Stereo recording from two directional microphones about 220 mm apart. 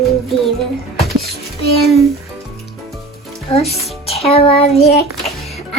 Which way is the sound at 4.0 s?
25° left (ahead or behind).